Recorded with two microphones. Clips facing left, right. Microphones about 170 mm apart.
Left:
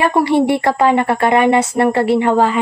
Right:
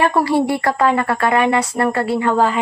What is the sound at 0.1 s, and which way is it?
Speech, 20° left (ahead or behind).